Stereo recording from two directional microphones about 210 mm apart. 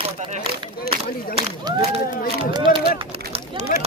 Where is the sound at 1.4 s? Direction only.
30° right (ahead or behind).